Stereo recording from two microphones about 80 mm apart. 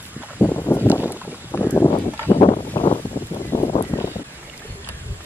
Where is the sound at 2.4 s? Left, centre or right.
Left.